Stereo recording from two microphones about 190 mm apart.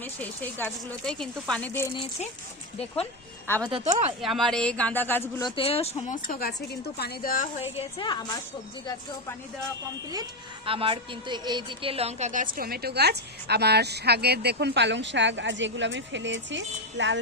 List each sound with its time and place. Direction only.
0.0 s speech: 10° left (ahead or behind)
3.6 s speech: 25° right (ahead or behind)
3.8 s speech: 40° right (ahead or behind)
4.2 s speech: centre (ahead or behind)
5.4 s speech: 25° left (ahead or behind); by 7.4 s 50° left (ahead or behind)
7.6 s a woman's voice: 30° left (ahead or behind)
10.7 s a woman's voice: 30° right (ahead or behind); by 17.2 s 70° right (ahead or behind)